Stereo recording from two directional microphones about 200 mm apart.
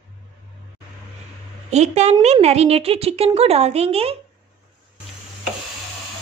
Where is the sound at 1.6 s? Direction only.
35° right (ahead or behind).